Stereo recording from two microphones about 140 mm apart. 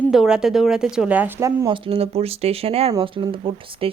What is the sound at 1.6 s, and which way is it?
Speech, 40° right (ahead or behind).